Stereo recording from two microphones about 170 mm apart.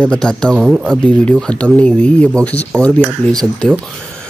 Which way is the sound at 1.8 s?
5° left (ahead or behind).